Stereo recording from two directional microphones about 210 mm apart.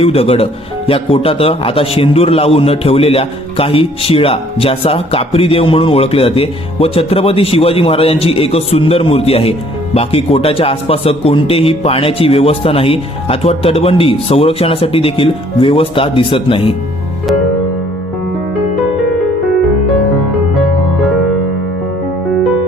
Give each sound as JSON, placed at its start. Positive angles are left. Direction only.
{"t": 0.0, "sound": "a man's voice", "side_deg": 30}